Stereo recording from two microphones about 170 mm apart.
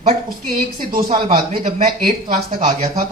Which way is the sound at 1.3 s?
60° right (ahead or behind).